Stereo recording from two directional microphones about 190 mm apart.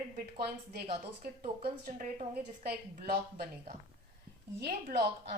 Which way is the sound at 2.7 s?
55° right (ahead or behind).